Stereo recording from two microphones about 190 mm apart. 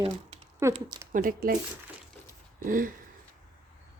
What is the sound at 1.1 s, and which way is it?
Speech, 50° right (ahead or behind).